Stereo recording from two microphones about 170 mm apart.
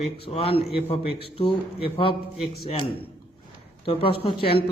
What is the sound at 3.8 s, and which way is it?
Speech, 30° left (ahead or behind).